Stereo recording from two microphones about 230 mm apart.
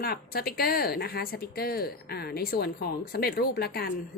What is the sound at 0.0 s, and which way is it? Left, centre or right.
A woman's voice, left.